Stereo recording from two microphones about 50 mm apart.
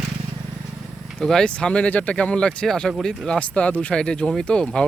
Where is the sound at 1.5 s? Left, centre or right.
Left.